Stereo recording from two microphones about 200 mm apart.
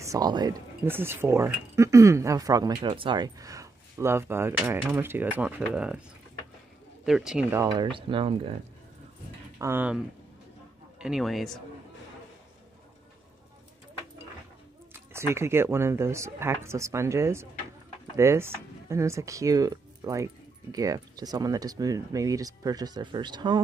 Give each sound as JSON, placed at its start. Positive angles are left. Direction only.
{"t": 0.0, "sound": "speech", "side_deg": -15}
{"t": 7.1, "sound": "speech", "side_deg": -5}
{"t": 7.6, "sound": "speech", "side_deg": -20}
{"t": 9.6, "sound": "speech", "side_deg": -10}
{"t": 15.1, "sound": "speech", "side_deg": -15}